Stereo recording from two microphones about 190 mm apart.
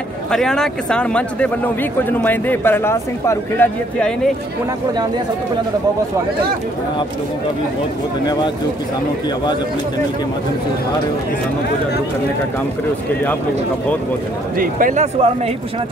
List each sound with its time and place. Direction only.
0.3 s speech: 5° left (ahead or behind)
14.6 s speech: 45° right (ahead or behind)